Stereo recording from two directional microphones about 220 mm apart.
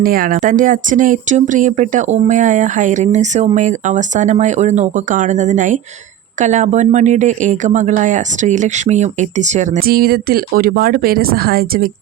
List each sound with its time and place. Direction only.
0.0 s speech: 40° right (ahead or behind)